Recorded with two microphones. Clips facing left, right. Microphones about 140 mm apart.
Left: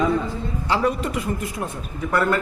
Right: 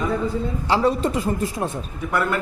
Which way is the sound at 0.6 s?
30° right (ahead or behind).